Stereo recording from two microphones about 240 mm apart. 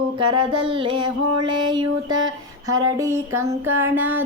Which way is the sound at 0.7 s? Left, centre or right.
Right.